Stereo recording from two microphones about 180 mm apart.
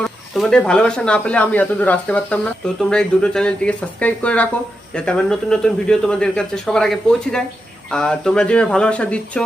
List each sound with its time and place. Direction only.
0.0 s speech: 5° left (ahead or behind)